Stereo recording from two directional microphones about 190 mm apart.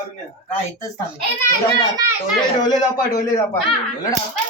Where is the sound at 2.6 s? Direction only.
20° left (ahead or behind).